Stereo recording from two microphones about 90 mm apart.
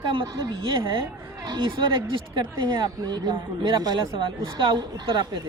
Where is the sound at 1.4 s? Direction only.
55° right (ahead or behind).